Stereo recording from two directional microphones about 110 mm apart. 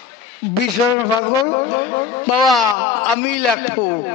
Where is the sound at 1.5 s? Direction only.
30° left (ahead or behind).